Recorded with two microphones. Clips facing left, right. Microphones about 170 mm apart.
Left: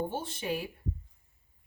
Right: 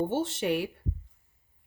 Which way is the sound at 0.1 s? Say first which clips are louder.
Right 7 dB; 80° right.